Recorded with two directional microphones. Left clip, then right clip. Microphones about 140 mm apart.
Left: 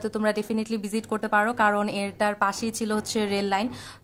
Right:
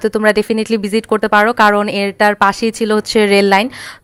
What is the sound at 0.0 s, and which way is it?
Speech, 45° right (ahead or behind).